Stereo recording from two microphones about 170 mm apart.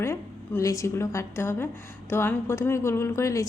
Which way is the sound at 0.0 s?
15° left (ahead or behind).